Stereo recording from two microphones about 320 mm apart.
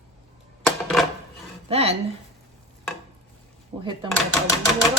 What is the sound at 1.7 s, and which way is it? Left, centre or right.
Speech, centre.